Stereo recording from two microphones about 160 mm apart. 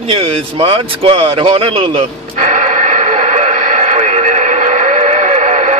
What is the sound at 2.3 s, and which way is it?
Radio, 50° right (ahead or behind).